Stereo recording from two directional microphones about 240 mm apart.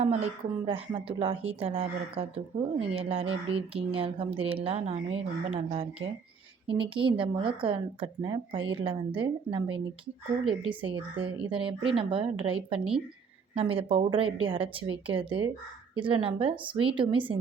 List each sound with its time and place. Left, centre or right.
0.0 s a woman's voice: right